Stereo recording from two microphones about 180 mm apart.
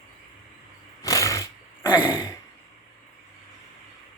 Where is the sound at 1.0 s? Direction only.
15° left (ahead or behind).